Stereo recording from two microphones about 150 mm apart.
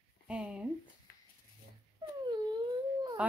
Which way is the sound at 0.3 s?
5° right (ahead or behind).